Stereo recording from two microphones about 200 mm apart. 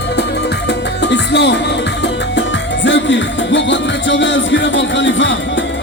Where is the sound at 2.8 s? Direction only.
65° left (ahead or behind).